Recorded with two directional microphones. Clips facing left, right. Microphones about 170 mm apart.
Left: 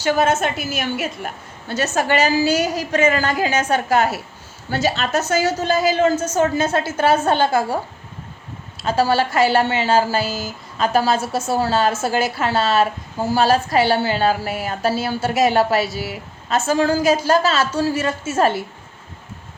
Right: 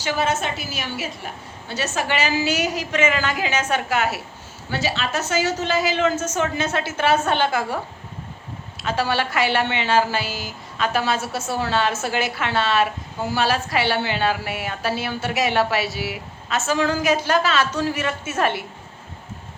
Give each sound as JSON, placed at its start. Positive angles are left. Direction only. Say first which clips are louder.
{"t": 0.0, "sound": "a woman's voice", "louder": "left 5 dB", "side_deg": 50}
{"t": 8.8, "sound": "a woman's voice", "louder": "left 5 dB", "side_deg": 35}